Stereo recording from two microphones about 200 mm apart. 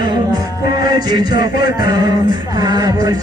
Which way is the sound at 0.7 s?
20° right (ahead or behind).